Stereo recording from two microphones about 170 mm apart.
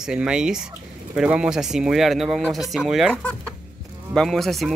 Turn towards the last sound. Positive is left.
turn(degrees=0)  # may be behind; listen again after turning